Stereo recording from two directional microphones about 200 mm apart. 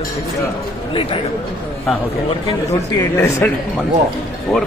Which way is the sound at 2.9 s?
15° left (ahead or behind).